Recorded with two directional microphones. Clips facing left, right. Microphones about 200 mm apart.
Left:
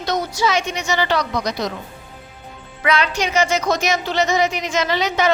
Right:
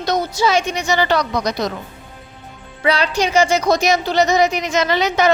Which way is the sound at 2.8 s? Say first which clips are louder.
Right 2 dB; 35° right (ahead or behind).